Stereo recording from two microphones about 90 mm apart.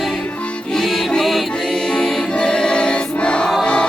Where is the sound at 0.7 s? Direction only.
5° left (ahead or behind).